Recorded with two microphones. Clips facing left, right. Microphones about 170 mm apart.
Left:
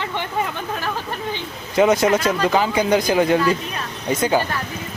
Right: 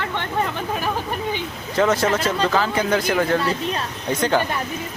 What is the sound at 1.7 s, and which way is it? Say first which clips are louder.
Speech: left 3 dB; 15° left (ahead or behind).